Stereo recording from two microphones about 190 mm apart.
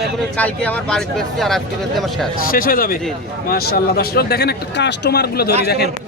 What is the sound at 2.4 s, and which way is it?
Speech, 50° left (ahead or behind).